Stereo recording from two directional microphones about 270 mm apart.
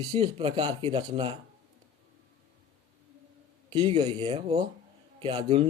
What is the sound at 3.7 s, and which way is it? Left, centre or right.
A man's voice, centre.